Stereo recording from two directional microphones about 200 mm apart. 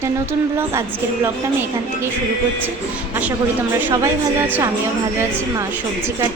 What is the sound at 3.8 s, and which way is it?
Speech, 15° right (ahead or behind).